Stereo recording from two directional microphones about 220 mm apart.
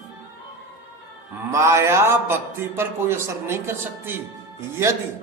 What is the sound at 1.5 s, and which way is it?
Speech, 15° right (ahead or behind).